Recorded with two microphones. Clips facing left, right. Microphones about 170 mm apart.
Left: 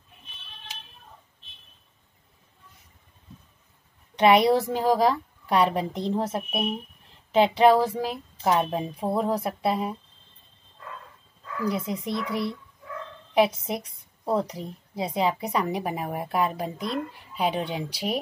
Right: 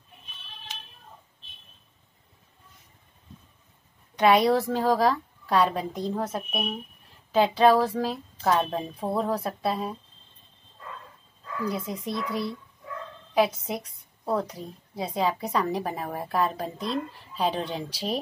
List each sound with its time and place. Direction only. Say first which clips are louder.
4.2 s a woman's voice: left 2 dB; 20° left (ahead or behind)
11.7 s a woman's voice: left 2 dB; 20° left (ahead or behind)